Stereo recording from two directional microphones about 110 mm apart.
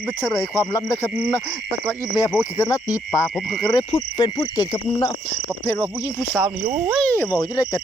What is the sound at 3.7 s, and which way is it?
Insect, 40° left (ahead or behind).